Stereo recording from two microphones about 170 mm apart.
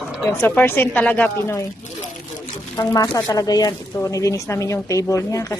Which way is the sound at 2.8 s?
20° left (ahead or behind).